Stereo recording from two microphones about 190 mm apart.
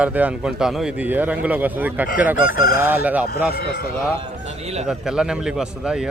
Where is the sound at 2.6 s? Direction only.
50° left (ahead or behind).